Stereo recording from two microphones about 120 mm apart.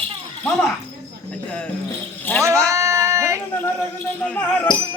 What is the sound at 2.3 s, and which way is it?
Speech, 20° left (ahead or behind).